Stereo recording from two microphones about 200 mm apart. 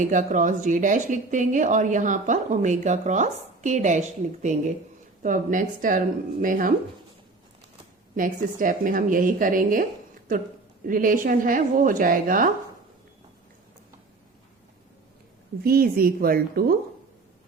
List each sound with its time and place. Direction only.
0.0 s a woman's voice: 40° right (ahead or behind)
8.1 s a woman's voice: 40° right (ahead or behind)
10.8 s a woman's voice: 45° right (ahead or behind)
15.6 s a woman's voice: 50° right (ahead or behind)